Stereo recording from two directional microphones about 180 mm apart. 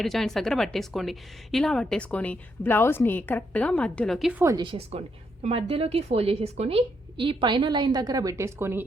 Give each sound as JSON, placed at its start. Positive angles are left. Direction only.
{"t": 0.0, "sound": "a woman's voice", "side_deg": 0}
{"t": 4.5, "sound": "a woman's voice", "side_deg": -30}